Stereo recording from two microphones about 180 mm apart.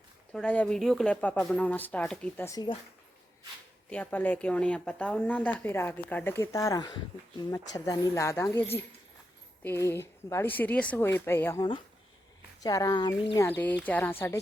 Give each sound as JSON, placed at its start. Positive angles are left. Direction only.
{"t": 0.3, "sound": "speech", "side_deg": 5}
{"t": 3.8, "sound": "speech", "side_deg": 10}
{"t": 9.6, "sound": "speech", "side_deg": 15}
{"t": 12.6, "sound": "speech", "side_deg": 20}